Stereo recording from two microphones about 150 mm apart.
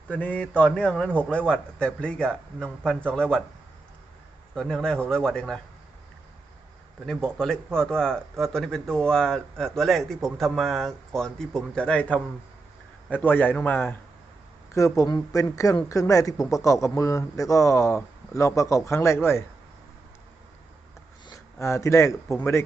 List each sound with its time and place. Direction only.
0.1 s a man's voice: 10° left (ahead or behind)
4.5 s speech: 5° left (ahead or behind)
7.0 s a man's voice: 5° left (ahead or behind)
21.2 s speech: 20° left (ahead or behind)